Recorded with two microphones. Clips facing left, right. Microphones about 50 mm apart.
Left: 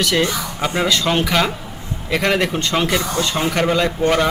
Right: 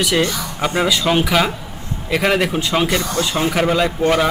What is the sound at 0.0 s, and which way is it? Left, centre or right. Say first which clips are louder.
Speech: even; centre.